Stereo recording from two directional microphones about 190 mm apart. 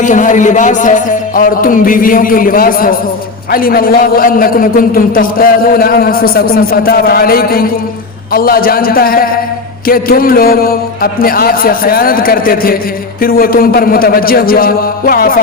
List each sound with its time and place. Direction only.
0.0 s a man's voice: 40° left (ahead or behind)